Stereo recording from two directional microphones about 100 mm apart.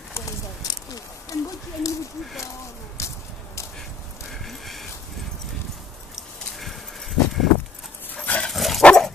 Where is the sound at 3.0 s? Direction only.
30° left (ahead or behind).